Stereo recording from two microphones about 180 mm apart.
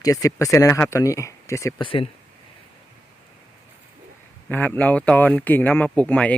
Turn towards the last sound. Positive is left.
turn(degrees=5)  # may be behind; listen again after turning